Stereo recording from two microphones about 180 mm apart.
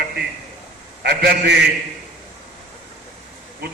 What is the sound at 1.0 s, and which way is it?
Speech, 60° right (ahead or behind).